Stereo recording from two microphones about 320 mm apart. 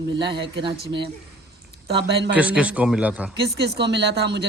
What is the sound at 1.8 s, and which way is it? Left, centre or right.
Speech, right.